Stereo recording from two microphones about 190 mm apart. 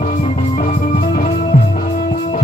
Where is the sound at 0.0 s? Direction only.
45° left (ahead or behind).